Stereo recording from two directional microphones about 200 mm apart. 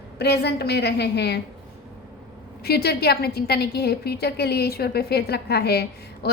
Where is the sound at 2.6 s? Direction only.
50° left (ahead or behind).